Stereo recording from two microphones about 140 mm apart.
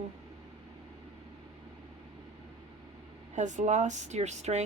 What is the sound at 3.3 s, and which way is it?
Speech, 60° right (ahead or behind).